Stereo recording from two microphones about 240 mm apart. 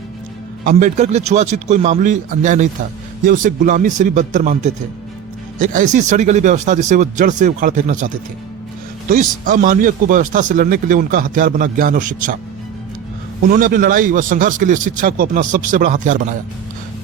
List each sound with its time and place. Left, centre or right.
0.6 s speech: right
9.4 s speech: right
13.5 s speech: right